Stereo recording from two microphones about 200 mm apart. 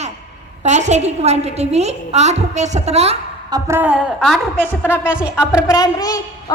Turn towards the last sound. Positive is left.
turn(degrees=20)  # may be behind; listen again after turning